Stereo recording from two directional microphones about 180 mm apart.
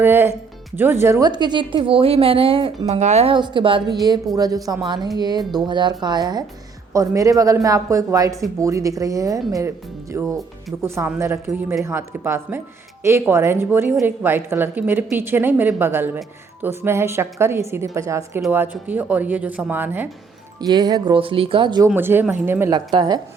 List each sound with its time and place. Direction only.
0.0 s a woman's voice: 10° right (ahead or behind)
20.6 s a woman's voice: 25° right (ahead or behind)
21.9 s speech: 10° right (ahead or behind)